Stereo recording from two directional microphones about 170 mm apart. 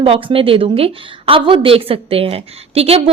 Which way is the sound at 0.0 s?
35° right (ahead or behind).